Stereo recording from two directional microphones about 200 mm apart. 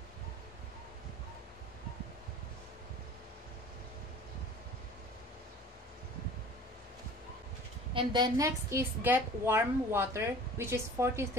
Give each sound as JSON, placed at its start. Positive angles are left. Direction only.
{"t": 7.9, "sound": "a woman's voice", "side_deg": -25}